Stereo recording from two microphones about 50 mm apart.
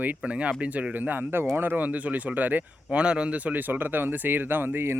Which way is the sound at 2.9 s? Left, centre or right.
Right.